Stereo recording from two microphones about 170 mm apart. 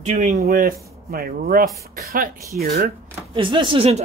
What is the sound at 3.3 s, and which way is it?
Speech, 30° right (ahead or behind).